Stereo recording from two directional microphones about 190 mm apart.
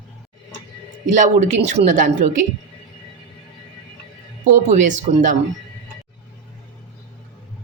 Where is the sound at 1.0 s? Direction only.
40° right (ahead or behind).